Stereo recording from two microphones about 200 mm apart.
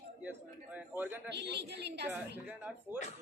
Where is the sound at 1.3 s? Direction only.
60° right (ahead or behind).